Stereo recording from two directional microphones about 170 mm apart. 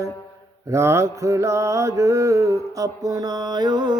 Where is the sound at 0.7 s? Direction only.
15° right (ahead or behind).